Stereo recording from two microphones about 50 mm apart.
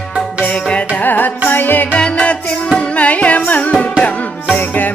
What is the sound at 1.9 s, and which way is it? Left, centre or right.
Music, left.